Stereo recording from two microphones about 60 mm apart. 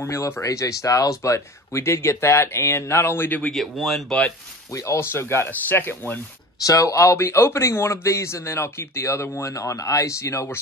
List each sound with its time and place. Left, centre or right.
0.0 s speech: left
3.3 s speech: left
3.7 s speech: centre
4.7 s speech: left
5.1 s speech: left
5.5 s speech: left
6.6 s speech: left